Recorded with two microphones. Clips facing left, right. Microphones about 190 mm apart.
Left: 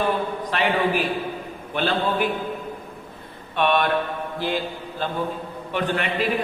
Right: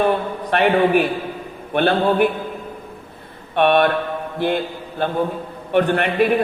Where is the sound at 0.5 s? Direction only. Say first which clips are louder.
Right 7 dB; 60° right (ahead or behind).